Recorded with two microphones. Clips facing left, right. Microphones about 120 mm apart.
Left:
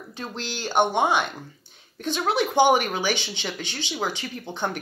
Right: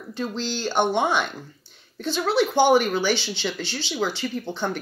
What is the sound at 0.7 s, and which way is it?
Speech, 50° left (ahead or behind).